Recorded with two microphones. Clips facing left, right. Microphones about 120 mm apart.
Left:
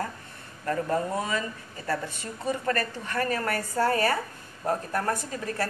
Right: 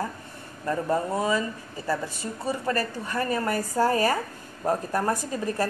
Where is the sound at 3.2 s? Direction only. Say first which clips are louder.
Right 3 dB; 20° right (ahead or behind).